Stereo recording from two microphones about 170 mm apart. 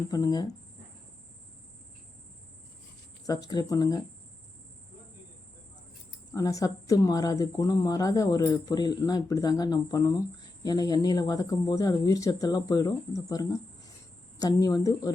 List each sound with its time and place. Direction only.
0.1 s speech: 20° left (ahead or behind)
3.2 s speech: 20° left (ahead or behind)
6.3 s speech: 20° left (ahead or behind)